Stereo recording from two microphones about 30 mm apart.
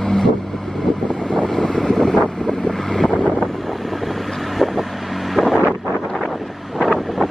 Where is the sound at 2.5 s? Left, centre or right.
Centre.